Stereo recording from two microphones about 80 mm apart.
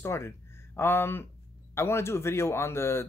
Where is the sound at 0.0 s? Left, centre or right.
Left.